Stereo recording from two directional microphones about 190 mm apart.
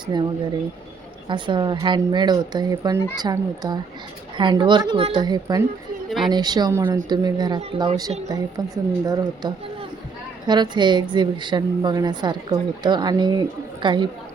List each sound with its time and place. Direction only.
0.0 s speech: 25° right (ahead or behind)
1.3 s a woman's voice: 25° right (ahead or behind)